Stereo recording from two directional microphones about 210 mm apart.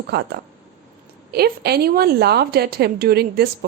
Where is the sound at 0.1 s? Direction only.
50° right (ahead or behind).